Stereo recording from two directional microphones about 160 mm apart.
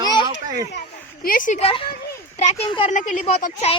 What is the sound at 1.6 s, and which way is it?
Speech, 35° left (ahead or behind).